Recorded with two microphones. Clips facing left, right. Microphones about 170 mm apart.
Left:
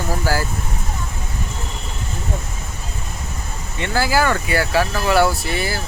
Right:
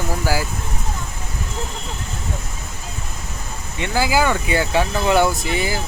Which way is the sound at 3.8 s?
15° right (ahead or behind).